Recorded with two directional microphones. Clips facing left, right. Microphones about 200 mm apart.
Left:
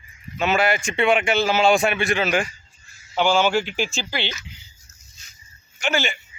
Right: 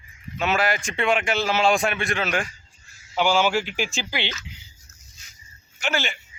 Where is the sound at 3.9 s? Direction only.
15° right (ahead or behind).